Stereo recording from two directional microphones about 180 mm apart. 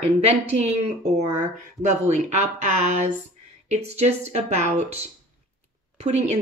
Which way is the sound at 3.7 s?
35° right (ahead or behind).